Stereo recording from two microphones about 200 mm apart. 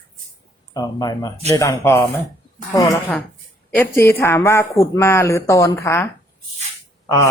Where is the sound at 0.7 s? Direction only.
20° left (ahead or behind).